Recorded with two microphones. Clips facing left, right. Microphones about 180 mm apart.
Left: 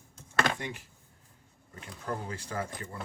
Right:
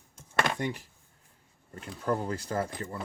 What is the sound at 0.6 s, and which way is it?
Speech, 35° right (ahead or behind).